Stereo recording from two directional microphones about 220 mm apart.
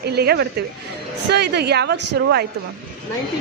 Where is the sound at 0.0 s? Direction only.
45° right (ahead or behind).